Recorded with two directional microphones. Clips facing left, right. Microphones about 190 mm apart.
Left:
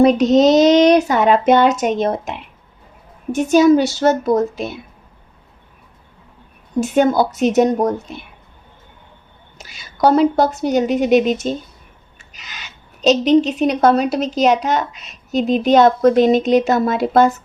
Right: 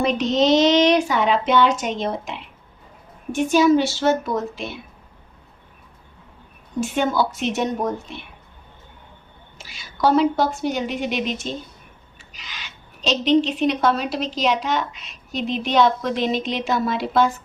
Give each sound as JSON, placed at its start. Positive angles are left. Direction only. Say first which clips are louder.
{"t": 0.0, "sound": "child singing", "louder": "left 8 dB", "side_deg": 40}
{"t": 1.0, "sound": "a woman's voice", "louder": "left 6 dB", "side_deg": 45}
{"t": 3.3, "sound": "child singing", "louder": "left 5 dB", "side_deg": 40}
{"t": 6.7, "sound": "child singing", "louder": "left 6 dB", "side_deg": 40}
{"t": 9.6, "sound": "a woman's voice", "louder": "left 5 dB", "side_deg": 45}